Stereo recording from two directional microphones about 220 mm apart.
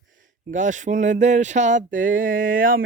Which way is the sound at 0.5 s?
35° right (ahead or behind).